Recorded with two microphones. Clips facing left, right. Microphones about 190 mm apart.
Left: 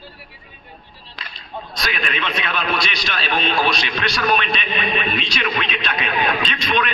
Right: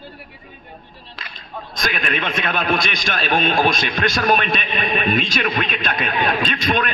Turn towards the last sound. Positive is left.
turn(degrees=-45)  # may be behind; listen again after turning